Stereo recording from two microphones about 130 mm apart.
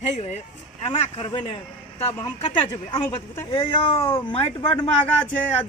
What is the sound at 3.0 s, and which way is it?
Speech, 15° left (ahead or behind).